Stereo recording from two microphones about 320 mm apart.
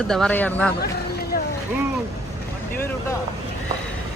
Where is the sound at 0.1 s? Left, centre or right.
Centre.